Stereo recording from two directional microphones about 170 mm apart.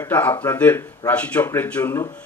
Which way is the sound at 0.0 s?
10° left (ahead or behind).